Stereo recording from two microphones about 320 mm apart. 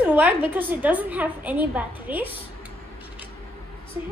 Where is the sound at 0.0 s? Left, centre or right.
Centre.